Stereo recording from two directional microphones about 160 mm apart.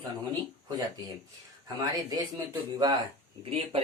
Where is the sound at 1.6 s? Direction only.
25° right (ahead or behind).